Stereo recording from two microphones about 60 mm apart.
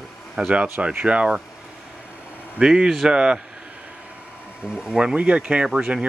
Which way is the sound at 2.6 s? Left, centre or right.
Centre.